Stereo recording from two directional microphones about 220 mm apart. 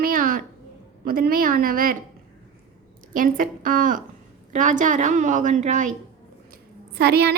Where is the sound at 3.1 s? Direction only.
40° right (ahead or behind).